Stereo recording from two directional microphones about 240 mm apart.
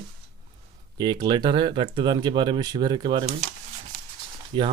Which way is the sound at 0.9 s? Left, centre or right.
Centre.